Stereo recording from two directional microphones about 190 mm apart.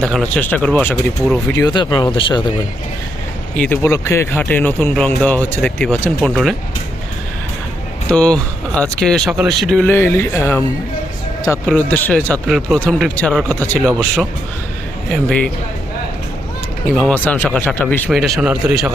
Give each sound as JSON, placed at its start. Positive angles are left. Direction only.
{"t": 0.0, "sound": "speech", "side_deg": 5}
{"t": 1.5, "sound": "speech", "side_deg": 25}
{"t": 3.6, "sound": "speech", "side_deg": 15}
{"t": 8.1, "sound": "speech", "side_deg": 5}
{"t": 16.9, "sound": "speech", "side_deg": 5}